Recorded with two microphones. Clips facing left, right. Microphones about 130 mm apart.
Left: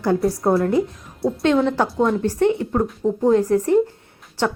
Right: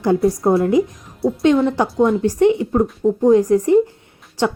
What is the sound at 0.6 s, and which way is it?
Speech, 15° right (ahead or behind).